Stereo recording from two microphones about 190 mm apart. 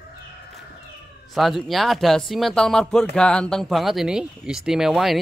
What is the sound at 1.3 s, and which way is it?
Speech, centre (ahead or behind).